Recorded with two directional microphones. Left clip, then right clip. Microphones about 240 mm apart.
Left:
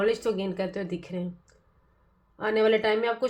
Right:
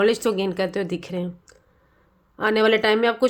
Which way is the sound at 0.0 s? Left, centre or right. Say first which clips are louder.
Right 6 dB; right.